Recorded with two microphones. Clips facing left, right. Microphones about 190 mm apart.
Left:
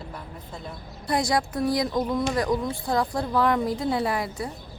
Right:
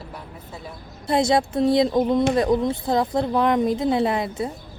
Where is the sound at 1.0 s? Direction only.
25° right (ahead or behind).